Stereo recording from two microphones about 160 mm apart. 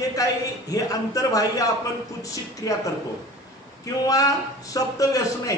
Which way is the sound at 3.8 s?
20° left (ahead or behind).